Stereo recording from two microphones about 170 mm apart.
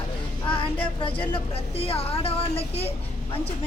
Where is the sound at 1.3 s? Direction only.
35° left (ahead or behind).